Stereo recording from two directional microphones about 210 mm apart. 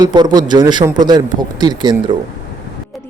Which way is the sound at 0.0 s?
20° right (ahead or behind).